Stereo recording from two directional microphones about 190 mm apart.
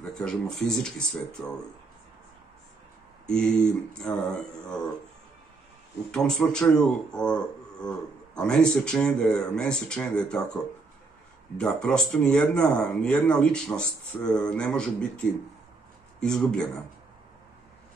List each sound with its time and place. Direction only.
0.1 s speech: 5° left (ahead or behind)
3.3 s speech: 5° left (ahead or behind)
6.1 s speech: 5° left (ahead or behind)